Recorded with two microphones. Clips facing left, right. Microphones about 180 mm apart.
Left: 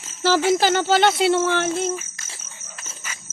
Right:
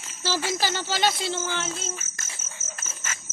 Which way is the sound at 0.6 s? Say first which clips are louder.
Left 8 dB; 55° left (ahead or behind).